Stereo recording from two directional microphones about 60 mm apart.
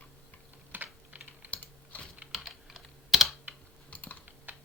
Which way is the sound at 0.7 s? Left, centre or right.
Right.